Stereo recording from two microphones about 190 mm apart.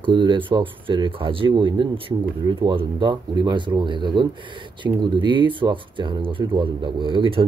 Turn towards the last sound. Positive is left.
turn(degrees=-30)  # may be behind; listen again after turning